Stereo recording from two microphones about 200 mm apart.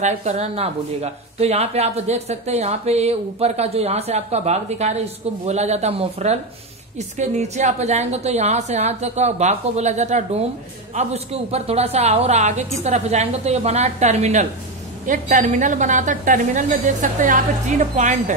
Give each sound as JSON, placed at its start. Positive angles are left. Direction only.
{"t": 0.0, "sound": "speech", "side_deg": -35}